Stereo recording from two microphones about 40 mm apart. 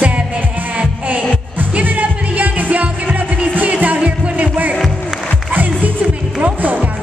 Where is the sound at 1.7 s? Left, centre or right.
Right.